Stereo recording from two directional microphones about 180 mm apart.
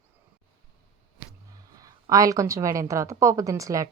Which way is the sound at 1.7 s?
20° right (ahead or behind).